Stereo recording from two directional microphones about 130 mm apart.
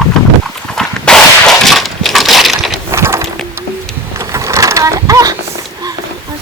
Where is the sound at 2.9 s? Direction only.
20° right (ahead or behind).